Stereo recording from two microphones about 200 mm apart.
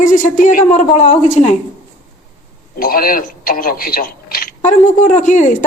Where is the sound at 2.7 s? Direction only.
45° left (ahead or behind).